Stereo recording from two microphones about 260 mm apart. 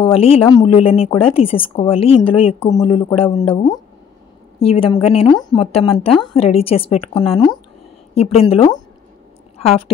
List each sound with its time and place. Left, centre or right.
0.0 s a woman's voice: left